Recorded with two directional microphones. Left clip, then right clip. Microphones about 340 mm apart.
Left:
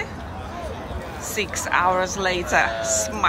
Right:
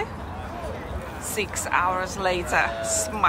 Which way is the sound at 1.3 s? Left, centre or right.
Centre.